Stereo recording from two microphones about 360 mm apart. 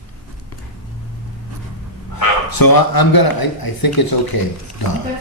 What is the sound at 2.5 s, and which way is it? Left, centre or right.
Speech, left.